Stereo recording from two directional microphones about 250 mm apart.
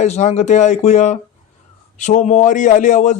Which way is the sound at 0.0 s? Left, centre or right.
Left.